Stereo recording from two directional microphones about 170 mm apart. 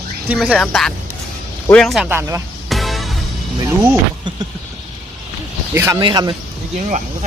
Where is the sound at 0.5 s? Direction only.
5° left (ahead or behind).